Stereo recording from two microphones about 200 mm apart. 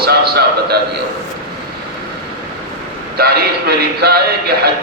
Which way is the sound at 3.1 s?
50° right (ahead or behind).